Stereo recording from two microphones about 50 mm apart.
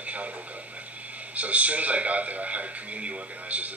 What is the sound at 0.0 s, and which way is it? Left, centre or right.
Radio, right.